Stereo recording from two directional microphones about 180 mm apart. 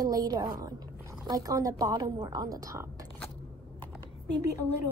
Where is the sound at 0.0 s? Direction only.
20° right (ahead or behind).